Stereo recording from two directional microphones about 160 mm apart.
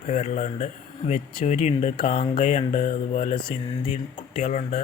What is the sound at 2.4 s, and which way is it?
Speech, 45° left (ahead or behind).